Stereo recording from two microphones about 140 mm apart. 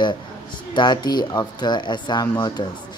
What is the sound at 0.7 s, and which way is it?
Speech, 30° left (ahead or behind).